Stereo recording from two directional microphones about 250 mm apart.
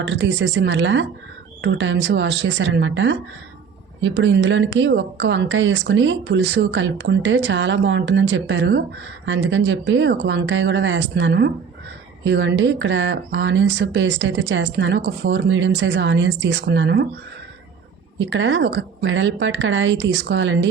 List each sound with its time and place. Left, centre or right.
0.0 s a woman's voice: right
18.2 s a woman's voice: right